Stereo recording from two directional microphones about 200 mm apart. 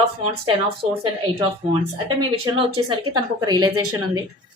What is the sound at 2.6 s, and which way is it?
A woman's voice, 25° right (ahead or behind).